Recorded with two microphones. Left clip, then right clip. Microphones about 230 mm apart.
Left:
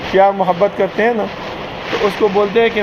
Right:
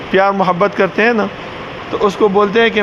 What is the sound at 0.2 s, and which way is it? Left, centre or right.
A man's voice, right.